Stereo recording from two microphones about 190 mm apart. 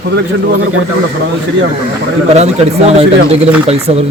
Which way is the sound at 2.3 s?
35° right (ahead or behind).